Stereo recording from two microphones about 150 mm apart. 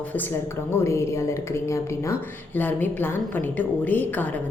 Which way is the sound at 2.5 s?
10° left (ahead or behind).